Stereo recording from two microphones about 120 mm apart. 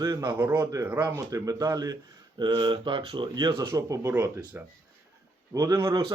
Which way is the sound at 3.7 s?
25° right (ahead or behind).